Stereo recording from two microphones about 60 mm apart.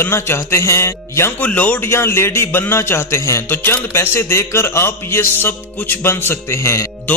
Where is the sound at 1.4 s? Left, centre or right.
Left.